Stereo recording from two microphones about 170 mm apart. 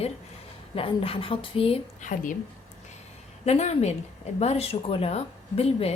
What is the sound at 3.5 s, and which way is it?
Speech, 40° left (ahead or behind).